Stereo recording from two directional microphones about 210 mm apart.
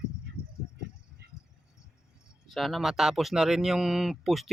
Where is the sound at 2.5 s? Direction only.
Centre (ahead or behind).